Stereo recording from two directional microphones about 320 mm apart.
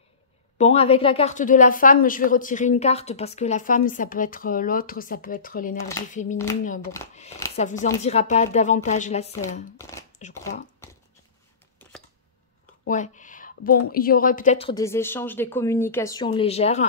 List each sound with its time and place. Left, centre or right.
0.6 s a woman's voice: centre
7.2 s a woman's voice: centre
9.8 s a woman's voice: centre
11.8 s a sound: centre
12.8 s a sound: left
13.8 s a woman's voice: left